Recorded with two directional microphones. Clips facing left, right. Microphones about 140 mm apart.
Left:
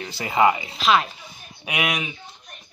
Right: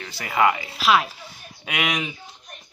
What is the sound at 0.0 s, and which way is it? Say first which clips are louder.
Speech: left 2 dB; 25° left (ahead or behind).